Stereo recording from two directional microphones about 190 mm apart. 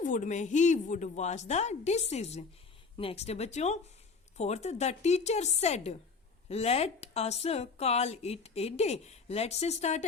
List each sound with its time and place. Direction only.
0.0 s a woman's voice: 40° left (ahead or behind)